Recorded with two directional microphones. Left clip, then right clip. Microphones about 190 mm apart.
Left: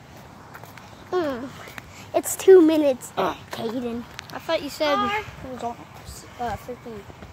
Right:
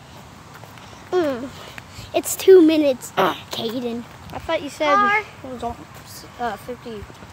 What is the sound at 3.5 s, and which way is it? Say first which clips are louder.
Speech: right 3 dB; 5° right (ahead or behind).